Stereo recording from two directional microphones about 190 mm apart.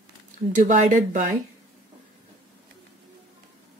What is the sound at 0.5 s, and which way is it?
Speech, 40° right (ahead or behind).